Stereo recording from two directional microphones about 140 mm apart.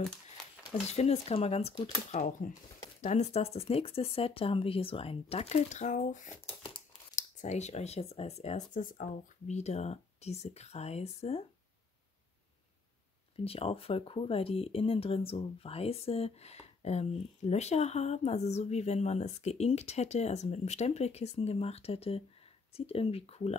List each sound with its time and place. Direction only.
0.8 s speech: 50° left (ahead or behind)
13.4 s speech: 45° left (ahead or behind)